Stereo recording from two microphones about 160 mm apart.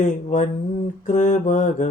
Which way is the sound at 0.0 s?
50° left (ahead or behind).